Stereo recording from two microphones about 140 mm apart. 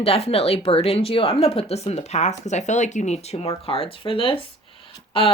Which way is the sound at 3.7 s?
40° left (ahead or behind).